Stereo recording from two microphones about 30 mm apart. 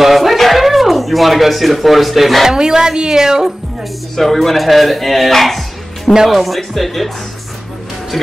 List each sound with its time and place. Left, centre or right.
0.0 s a sound: centre
2.4 s speech: right
4.2 s speech: centre